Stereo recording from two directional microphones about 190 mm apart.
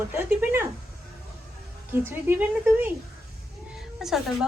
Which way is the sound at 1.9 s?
10° right (ahead or behind).